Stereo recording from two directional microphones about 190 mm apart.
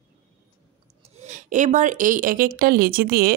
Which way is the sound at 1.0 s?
35° right (ahead or behind).